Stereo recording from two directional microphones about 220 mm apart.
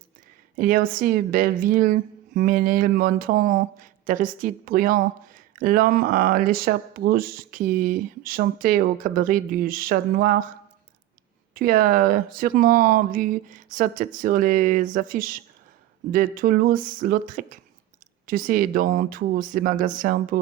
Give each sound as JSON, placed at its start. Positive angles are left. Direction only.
{"t": 0.5, "sound": "a woman's voice", "side_deg": -40}
{"t": 11.5, "sound": "a woman's voice", "side_deg": -40}